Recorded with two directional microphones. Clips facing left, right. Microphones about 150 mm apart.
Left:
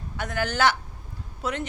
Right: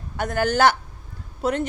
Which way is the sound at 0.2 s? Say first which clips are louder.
Right 5 dB; 45° right (ahead or behind).